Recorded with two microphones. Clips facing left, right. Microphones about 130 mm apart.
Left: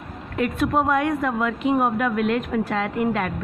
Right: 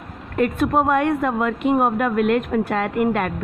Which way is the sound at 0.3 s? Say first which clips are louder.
Right 3 dB; 45° right (ahead or behind).